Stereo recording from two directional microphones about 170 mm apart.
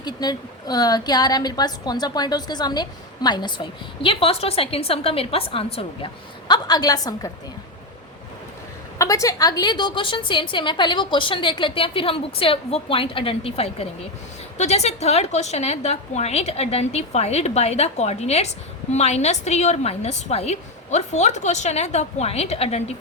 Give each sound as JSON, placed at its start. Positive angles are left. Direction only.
{"t": 0.0, "sound": "a woman's voice", "side_deg": 25}
{"t": 9.0, "sound": "a woman's voice", "side_deg": 20}